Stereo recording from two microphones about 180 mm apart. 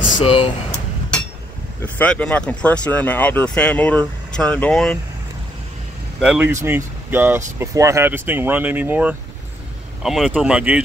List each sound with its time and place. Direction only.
0.2 s speech: 30° left (ahead or behind)
2.0 s speech: 5° left (ahead or behind)
6.2 s speech: 5° right (ahead or behind)